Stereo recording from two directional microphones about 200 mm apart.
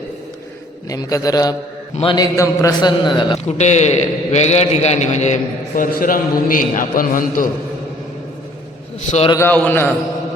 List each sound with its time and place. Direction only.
0.9 s a man's voice: 15° left (ahead or behind)
2.3 s a man's voice: 15° left (ahead or behind)
3.4 s a man's voice: 35° left (ahead or behind)
9.0 s a man's voice: 35° left (ahead or behind)
9.3 s a man's voice: 10° left (ahead or behind)